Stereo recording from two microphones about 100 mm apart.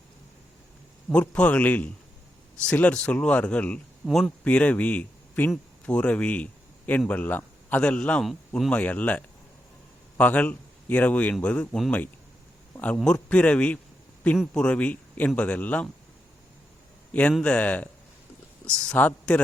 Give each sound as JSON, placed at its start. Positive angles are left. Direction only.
{"t": 1.1, "sound": "a man's voice", "side_deg": 15}
{"t": 4.0, "sound": "speech", "side_deg": 0}
{"t": 4.4, "sound": "a man's voice", "side_deg": 15}
{"t": 8.3, "sound": "speech", "side_deg": 0}
{"t": 8.7, "sound": "a man's voice", "side_deg": 15}
{"t": 13.2, "sound": "a man's voice", "side_deg": 15}
{"t": 17.4, "sound": "a man's voice", "side_deg": 10}